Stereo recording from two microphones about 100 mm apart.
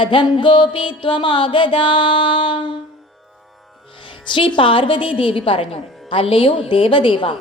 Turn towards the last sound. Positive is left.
turn(degrees=60)  # may be behind; listen again after turning